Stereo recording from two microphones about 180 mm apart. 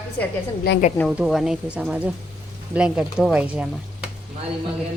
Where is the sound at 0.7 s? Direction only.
65° left (ahead or behind).